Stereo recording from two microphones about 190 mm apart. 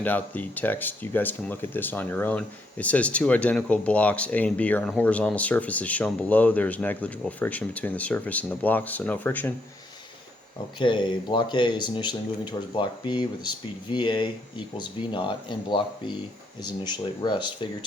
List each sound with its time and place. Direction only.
0.0 s speech: 10° left (ahead or behind)
10.8 s speech: 25° left (ahead or behind)